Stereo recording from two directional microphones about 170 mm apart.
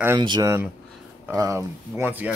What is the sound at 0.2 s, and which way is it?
Speech, 25° right (ahead or behind).